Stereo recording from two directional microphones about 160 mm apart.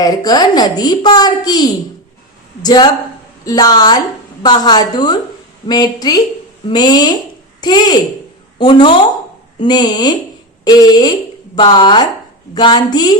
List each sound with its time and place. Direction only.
0.0 s a woman's voice: 25° left (ahead or behind)